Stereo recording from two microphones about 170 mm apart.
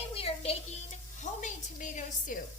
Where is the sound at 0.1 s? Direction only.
35° left (ahead or behind).